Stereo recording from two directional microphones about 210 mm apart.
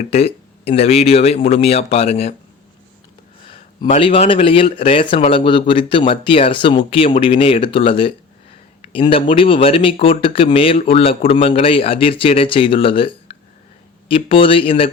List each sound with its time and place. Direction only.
0.1 s speech: 30° left (ahead or behind)
3.4 s speech: 35° left (ahead or behind)